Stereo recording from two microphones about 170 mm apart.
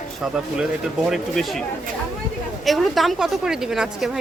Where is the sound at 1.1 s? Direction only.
Centre (ahead or behind).